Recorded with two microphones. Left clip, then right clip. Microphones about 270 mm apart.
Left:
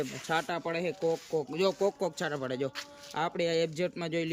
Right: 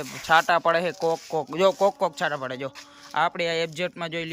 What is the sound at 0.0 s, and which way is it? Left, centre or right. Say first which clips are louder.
A man's voice: right 11 dB; centre.